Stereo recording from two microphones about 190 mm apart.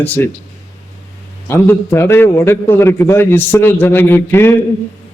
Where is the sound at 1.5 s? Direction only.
10° left (ahead or behind).